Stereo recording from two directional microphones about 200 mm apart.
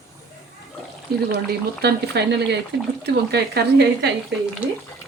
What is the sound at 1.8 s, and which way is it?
Speech, 55° right (ahead or behind).